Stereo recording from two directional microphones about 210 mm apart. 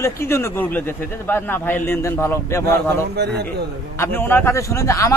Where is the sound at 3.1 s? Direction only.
55° right (ahead or behind).